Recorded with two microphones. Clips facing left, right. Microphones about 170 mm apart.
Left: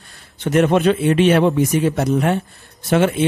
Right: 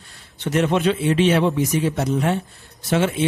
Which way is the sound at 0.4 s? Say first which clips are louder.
Left 4 dB; 50° left (ahead or behind).